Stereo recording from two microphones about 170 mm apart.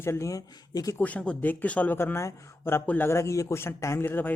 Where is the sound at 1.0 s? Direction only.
10° left (ahead or behind).